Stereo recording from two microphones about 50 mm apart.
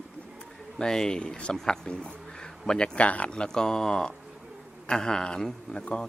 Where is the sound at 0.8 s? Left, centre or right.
Centre.